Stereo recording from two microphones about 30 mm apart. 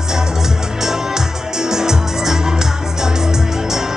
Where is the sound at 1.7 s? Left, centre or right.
Centre.